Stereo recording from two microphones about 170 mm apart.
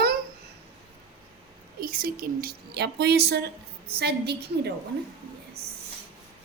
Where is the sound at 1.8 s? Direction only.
60° right (ahead or behind).